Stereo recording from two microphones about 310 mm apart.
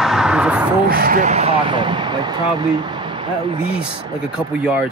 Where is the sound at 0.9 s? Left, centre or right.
Right.